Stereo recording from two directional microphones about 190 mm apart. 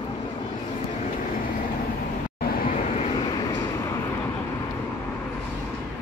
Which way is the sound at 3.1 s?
20° left (ahead or behind).